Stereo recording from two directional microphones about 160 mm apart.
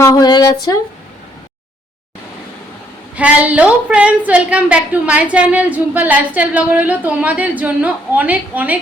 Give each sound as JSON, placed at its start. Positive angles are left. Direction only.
{"t": 0.0, "sound": "speech", "side_deg": 20}
{"t": 3.2, "sound": "a woman's voice", "side_deg": -10}